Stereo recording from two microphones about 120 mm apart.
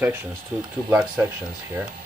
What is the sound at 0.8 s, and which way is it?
Speech, 10° right (ahead or behind).